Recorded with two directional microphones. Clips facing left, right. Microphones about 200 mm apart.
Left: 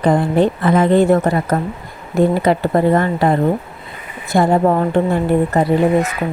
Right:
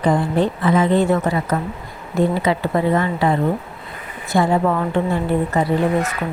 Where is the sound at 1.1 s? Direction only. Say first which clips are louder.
Left 4 dB; 45° left (ahead or behind).